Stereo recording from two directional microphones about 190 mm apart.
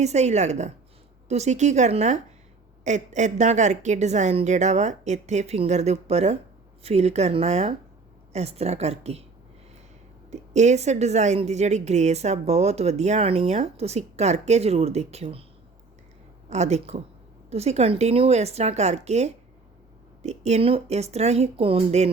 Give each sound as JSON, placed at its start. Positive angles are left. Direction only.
{"t": 0.0, "sound": "speech", "side_deg": -35}
{"t": 10.3, "sound": "speech", "side_deg": -40}
{"t": 16.5, "sound": "speech", "side_deg": -35}